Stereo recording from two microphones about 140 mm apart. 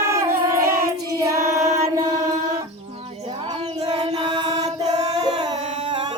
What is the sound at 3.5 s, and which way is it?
Child singing, 45° right (ahead or behind).